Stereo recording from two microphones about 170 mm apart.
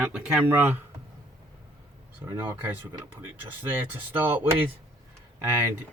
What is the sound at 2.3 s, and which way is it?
Speech, 15° right (ahead or behind).